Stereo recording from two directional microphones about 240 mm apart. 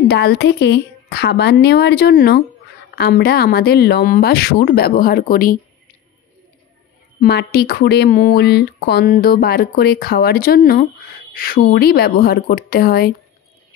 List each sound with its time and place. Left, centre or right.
0.1 s a woman's voice: left
7.2 s speech: left